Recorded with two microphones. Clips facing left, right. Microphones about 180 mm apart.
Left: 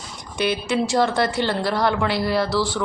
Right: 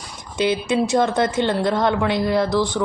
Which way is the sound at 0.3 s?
20° right (ahead or behind).